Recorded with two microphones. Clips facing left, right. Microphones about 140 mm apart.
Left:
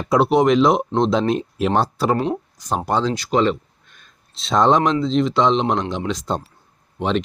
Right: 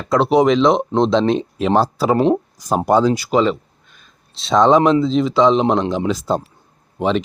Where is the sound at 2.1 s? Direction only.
30° right (ahead or behind).